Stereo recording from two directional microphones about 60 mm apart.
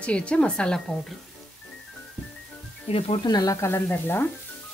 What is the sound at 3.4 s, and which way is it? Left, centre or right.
Speech, left.